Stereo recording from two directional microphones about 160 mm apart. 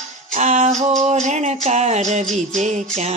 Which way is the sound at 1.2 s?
45° right (ahead or behind).